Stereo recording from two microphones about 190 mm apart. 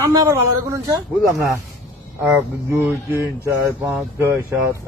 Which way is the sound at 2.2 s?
10° right (ahead or behind).